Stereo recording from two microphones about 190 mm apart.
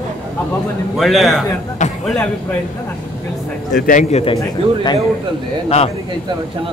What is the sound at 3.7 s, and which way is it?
Speech, 40° left (ahead or behind).